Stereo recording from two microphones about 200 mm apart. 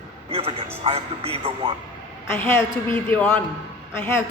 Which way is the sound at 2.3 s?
10° left (ahead or behind).